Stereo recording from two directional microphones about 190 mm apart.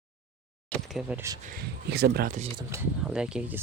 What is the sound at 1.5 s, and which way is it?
Speech, 60° right (ahead or behind).